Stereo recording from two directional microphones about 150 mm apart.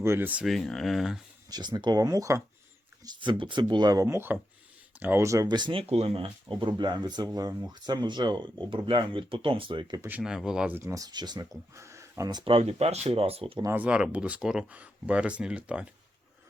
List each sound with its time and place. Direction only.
0.0 s speech: 15° right (ahead or behind)
0.4 s speech: centre (ahead or behind)
1.5 s speech: 25° right (ahead or behind)
5.8 s speech: 45° right (ahead or behind)
10.1 s speech: 5° right (ahead or behind); by 13.6 s 40° right (ahead or behind)
13.6 s speech: 15° right (ahead or behind)